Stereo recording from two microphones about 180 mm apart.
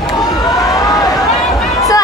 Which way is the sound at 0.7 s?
20° left (ahead or behind).